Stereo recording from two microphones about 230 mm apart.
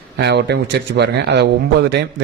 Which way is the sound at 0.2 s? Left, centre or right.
Right.